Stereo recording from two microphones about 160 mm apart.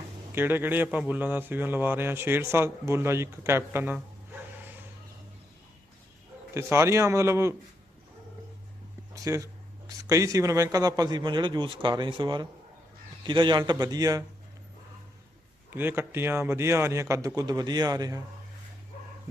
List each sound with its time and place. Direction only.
0.3 s a man's voice: 15° right (ahead or behind)
6.5 s a man's voice: 15° right (ahead or behind)
9.1 s a man's voice: 20° right (ahead or behind)
15.7 s a man's voice: 15° right (ahead or behind)